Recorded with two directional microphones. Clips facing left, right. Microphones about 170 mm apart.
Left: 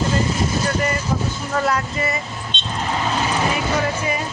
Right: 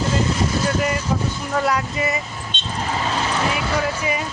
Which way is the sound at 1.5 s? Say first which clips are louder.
Even; 15° right (ahead or behind).